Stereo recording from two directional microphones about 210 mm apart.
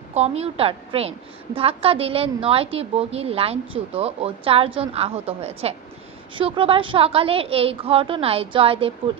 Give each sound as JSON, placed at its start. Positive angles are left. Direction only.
{"t": 0.1, "sound": "a woman's voice", "side_deg": -30}